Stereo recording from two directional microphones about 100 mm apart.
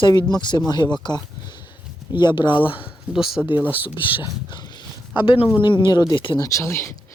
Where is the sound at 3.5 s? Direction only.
20° right (ahead or behind).